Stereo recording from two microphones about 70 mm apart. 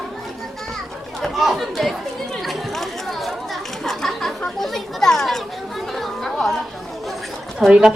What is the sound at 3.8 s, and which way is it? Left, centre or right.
Children playing, centre.